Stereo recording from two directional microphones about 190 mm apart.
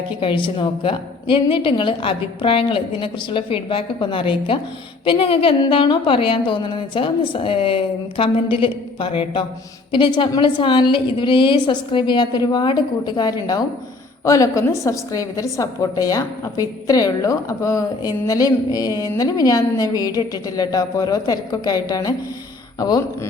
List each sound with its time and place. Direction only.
0.2 s a woman's voice: 25° left (ahead or behind)